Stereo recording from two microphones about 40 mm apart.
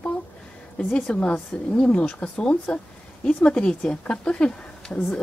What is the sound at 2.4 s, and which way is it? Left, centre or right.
Speech, left.